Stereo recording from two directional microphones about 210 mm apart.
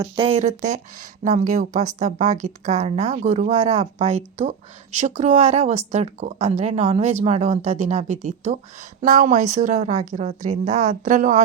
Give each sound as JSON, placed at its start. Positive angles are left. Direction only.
{"t": 0.0, "sound": "speech", "side_deg": -25}